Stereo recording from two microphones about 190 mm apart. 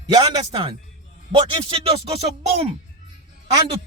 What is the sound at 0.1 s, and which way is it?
A man's voice, 20° right (ahead or behind).